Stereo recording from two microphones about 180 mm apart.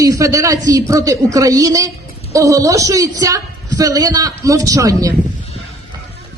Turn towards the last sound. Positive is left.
turn(degrees=-20)  # may be behind; listen again after turning